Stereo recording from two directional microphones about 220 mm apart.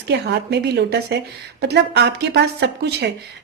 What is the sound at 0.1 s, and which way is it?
Speech, 50° right (ahead or behind).